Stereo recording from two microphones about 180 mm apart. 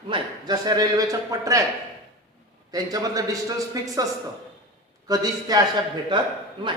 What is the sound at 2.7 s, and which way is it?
A man's voice, 20° right (ahead or behind).